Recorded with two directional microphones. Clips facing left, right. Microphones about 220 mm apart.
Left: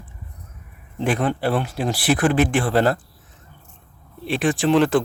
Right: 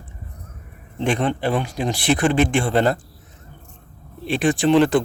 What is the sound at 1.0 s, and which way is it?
Speech, 5° left (ahead or behind).